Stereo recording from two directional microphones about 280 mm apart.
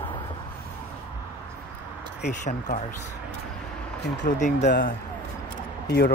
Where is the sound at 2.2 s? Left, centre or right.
Left.